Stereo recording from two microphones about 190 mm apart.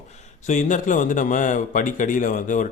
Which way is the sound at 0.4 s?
40° left (ahead or behind).